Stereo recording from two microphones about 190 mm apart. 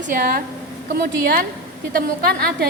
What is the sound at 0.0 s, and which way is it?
A woman's voice, 50° right (ahead or behind).